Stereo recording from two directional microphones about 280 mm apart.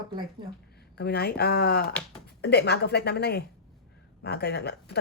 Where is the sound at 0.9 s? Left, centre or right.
Left.